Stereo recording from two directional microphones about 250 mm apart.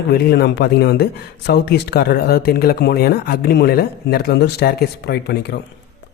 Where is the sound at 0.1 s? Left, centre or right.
Left.